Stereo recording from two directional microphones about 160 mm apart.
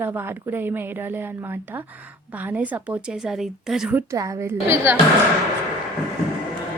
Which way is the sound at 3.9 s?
20° right (ahead or behind).